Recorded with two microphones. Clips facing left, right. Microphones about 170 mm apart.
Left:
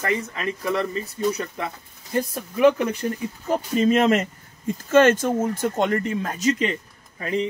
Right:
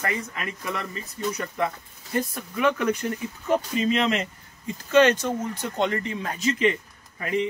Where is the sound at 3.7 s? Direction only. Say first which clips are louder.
Left 5 dB; 45° left (ahead or behind).